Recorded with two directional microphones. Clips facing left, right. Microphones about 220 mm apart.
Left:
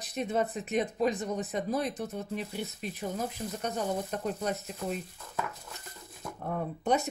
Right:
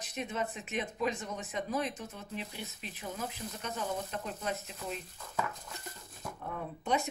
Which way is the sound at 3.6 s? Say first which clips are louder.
Left 5 dB; 40° left (ahead or behind).